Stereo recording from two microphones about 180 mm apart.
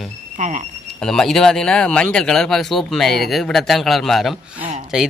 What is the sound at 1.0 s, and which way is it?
Speech, 5° left (ahead or behind).